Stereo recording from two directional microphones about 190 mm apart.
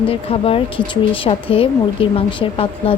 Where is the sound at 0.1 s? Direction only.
30° left (ahead or behind).